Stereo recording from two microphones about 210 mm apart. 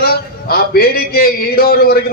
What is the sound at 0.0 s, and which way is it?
A man's voice, 45° left (ahead or behind).